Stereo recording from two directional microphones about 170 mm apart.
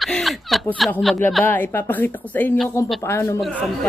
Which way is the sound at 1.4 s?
10° left (ahead or behind).